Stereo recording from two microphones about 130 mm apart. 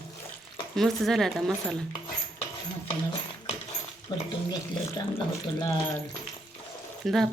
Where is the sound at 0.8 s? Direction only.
Centre (ahead or behind).